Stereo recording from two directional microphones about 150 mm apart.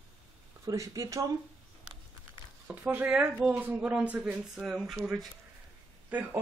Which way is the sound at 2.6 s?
10° right (ahead or behind).